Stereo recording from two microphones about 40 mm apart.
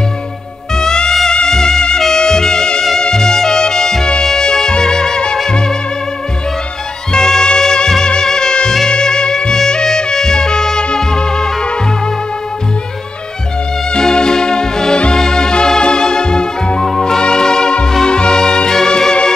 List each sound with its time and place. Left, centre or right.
0.7 s music: centre
7.1 s music: centre
13.9 s music: centre